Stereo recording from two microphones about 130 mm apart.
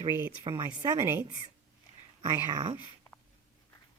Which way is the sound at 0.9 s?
20° right (ahead or behind).